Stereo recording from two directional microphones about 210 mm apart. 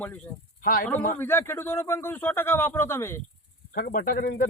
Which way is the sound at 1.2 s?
10° left (ahead or behind).